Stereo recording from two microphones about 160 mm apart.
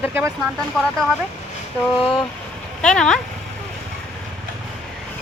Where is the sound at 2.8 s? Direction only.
5° left (ahead or behind).